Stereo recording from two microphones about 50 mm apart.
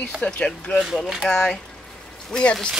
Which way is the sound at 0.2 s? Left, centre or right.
Left.